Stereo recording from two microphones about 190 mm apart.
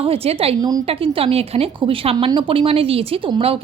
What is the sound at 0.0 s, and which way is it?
A woman's voice, 30° right (ahead or behind).